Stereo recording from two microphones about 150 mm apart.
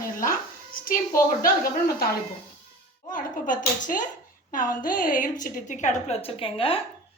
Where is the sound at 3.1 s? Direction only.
60° left (ahead or behind).